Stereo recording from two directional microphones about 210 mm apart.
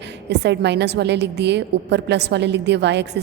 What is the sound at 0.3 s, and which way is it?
A woman's voice, 55° right (ahead or behind).